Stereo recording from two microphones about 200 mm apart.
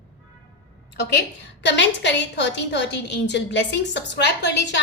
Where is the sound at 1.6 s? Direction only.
60° left (ahead or behind).